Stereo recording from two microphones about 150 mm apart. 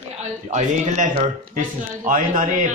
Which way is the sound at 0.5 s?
50° right (ahead or behind).